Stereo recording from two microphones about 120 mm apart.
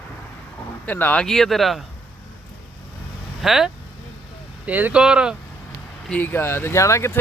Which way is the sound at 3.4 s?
5° right (ahead or behind).